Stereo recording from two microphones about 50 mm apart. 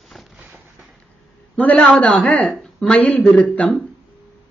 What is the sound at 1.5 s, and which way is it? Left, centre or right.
Speech, left.